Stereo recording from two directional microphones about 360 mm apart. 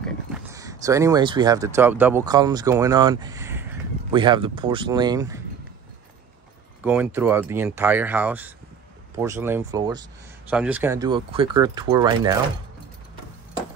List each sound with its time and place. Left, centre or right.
0.0 s speech: centre
6.8 s speech: centre